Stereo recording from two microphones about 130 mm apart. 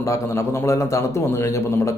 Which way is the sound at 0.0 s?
20° left (ahead or behind).